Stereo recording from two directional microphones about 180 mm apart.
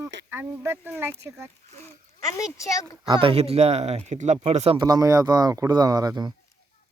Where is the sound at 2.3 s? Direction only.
15° left (ahead or behind).